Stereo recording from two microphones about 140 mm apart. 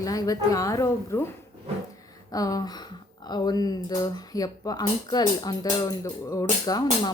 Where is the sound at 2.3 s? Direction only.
25° left (ahead or behind).